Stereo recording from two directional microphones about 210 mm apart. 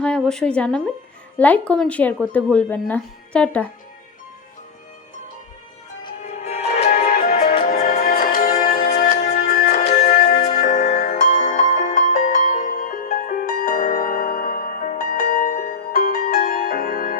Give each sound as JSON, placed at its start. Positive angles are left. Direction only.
{"t": 0.0, "sound": "speech", "side_deg": 5}
{"t": 6.2, "sound": "music", "side_deg": 30}
{"t": 7.6, "sound": "music", "side_deg": 40}